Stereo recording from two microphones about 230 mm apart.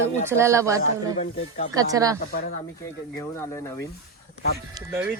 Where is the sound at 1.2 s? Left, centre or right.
Left.